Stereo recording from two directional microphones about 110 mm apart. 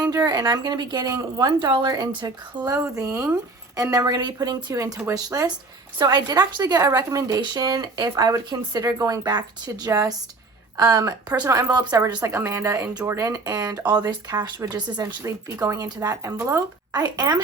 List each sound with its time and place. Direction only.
0.0 s speech: 35° right (ahead or behind)
11.9 s speech: 15° right (ahead or behind); by 15.0 s 40° right (ahead or behind)
15.2 s speech: 30° right (ahead or behind)